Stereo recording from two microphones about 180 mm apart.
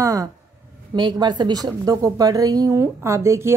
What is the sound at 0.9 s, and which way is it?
A woman's voice, 25° right (ahead or behind).